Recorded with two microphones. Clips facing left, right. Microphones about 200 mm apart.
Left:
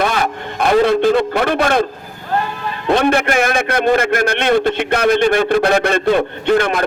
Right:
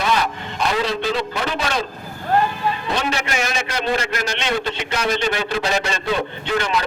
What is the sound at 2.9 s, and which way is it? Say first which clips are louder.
A man's voice: left 14 dB; 55° left (ahead or behind).